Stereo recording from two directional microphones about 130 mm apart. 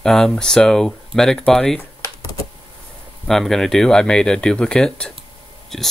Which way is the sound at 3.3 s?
5° left (ahead or behind).